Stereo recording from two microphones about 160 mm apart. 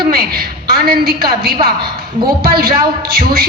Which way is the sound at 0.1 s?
70° right (ahead or behind).